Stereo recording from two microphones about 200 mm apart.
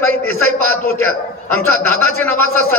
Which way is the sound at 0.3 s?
90° right.